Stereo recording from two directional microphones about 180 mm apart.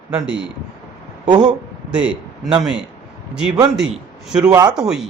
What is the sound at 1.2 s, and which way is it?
Speech, 25° right (ahead or behind).